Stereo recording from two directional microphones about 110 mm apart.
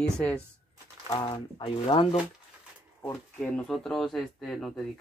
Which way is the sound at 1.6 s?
55° left (ahead or behind).